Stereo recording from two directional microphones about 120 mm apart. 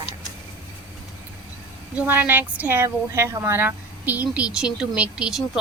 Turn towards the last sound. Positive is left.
turn(degrees=-5)  # may be behind; listen again after turning